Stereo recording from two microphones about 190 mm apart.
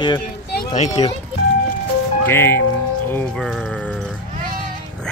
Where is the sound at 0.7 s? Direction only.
35° left (ahead or behind).